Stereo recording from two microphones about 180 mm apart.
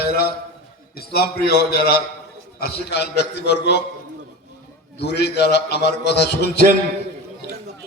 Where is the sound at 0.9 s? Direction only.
60° left (ahead or behind).